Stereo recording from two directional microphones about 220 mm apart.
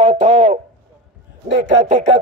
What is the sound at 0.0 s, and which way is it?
A man's voice, 30° right (ahead or behind).